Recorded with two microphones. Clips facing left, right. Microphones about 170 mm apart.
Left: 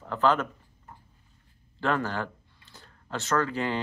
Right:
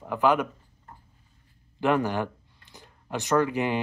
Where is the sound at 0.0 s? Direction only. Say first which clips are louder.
Right 2 dB; 15° right (ahead or behind).